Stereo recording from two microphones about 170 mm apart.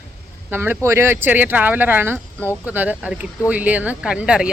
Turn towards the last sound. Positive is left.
turn(degrees=-5)  # may be behind; listen again after turning